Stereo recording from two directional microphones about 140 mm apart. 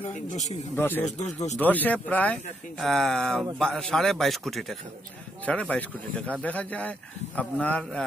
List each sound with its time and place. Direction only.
0.3 s a man's voice: 60° left (ahead or behind)
0.7 s speech: 15° left (ahead or behind)
1.0 s a man's voice: 55° left (ahead or behind)
1.6 s a man's voice: 10° left (ahead or behind)